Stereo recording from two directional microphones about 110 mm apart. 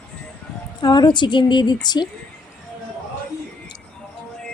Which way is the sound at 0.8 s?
40° left (ahead or behind).